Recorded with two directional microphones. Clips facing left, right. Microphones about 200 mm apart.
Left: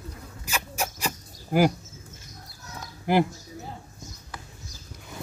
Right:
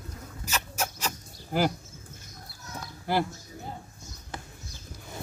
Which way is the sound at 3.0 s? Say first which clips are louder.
Left 5 dB; 15° left (ahead or behind).